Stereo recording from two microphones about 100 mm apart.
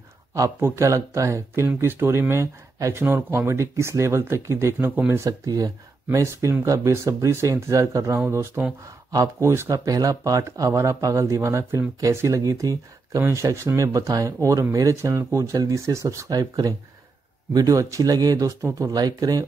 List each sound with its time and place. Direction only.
0.3 s speech: 25° right (ahead or behind)
5.2 s speech: 35° right (ahead or behind)
9.1 s speech: 35° right (ahead or behind)